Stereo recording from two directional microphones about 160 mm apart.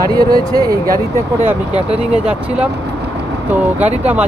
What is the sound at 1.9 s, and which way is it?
Speech, 5° right (ahead or behind).